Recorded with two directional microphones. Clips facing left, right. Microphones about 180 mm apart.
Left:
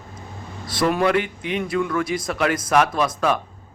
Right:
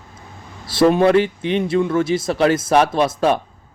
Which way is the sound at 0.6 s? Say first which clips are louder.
Right 6 dB; 25° right (ahead or behind).